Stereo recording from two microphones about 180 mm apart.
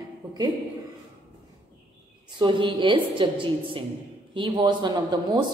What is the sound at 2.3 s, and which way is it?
Speech, 25° right (ahead or behind).